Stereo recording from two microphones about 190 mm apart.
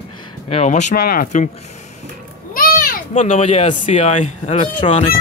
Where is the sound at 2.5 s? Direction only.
50° left (ahead or behind).